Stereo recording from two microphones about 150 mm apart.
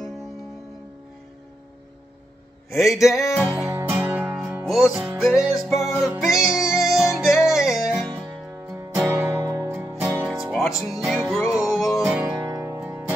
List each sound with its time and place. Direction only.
2.9 s music: centre (ahead or behind)
3.7 s music: 15° right (ahead or behind)
4.4 s music: centre (ahead or behind)
9.1 s music: 15° right (ahead or behind)
10.2 s music: centre (ahead or behind)
12.3 s music: 20° right (ahead or behind)